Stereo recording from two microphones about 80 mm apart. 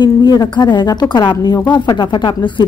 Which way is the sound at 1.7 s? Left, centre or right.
Left.